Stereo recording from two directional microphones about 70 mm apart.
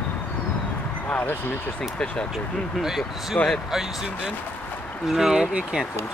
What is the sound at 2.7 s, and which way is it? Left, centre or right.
Speech, centre.